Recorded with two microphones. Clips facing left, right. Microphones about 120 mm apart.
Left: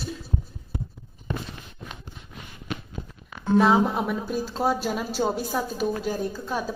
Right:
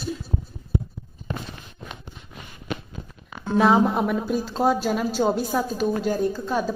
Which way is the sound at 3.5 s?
Centre (ahead or behind).